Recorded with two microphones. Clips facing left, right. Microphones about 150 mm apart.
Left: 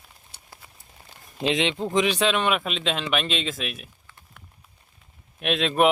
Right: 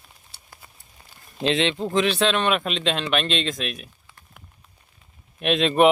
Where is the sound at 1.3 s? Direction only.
15° left (ahead or behind).